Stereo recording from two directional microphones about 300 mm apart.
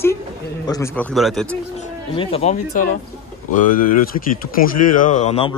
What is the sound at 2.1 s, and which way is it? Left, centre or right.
Speech, centre.